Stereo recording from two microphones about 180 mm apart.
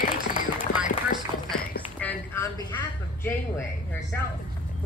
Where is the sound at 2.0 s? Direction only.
15° left (ahead or behind).